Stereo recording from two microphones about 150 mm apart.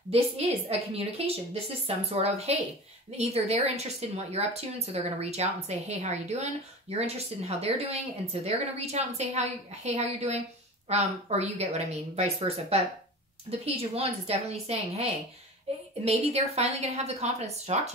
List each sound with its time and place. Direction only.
0.1 s a woman's voice: 45° right (ahead or behind)